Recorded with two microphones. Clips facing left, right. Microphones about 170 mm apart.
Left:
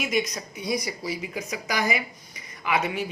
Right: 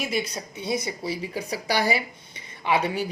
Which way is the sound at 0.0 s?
30° right (ahead or behind).